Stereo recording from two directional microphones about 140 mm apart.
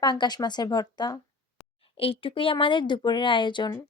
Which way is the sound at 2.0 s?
40° left (ahead or behind).